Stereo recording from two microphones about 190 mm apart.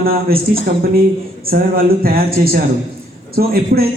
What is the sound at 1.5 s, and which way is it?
A man's voice, 50° right (ahead or behind).